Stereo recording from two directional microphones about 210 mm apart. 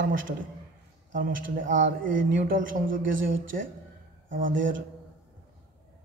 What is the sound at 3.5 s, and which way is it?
Speech, 45° right (ahead or behind).